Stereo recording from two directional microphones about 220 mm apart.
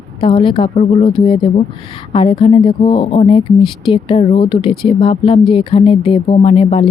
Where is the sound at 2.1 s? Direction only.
25° left (ahead or behind).